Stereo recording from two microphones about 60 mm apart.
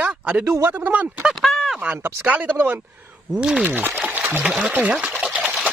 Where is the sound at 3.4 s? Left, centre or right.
Centre.